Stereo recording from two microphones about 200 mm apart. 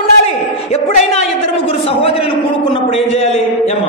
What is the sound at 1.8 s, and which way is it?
A man's voice, 30° left (ahead or behind).